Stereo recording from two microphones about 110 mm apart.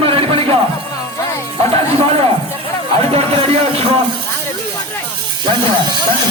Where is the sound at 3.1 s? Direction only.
65° right (ahead or behind).